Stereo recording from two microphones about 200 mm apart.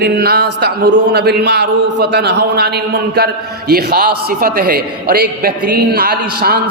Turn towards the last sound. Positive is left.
turn(degrees=-50)  # may be behind; listen again after turning